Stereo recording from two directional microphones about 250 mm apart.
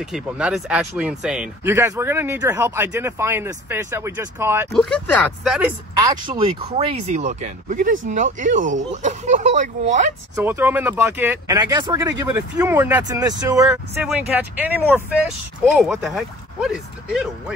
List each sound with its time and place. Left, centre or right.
0.0 s speech: centre
4.7 s speech: centre
5.9 s speech: centre
10.3 s speech: centre